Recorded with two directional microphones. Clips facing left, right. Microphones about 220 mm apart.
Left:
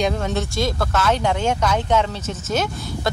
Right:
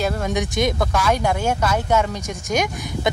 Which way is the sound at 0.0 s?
10° right (ahead or behind).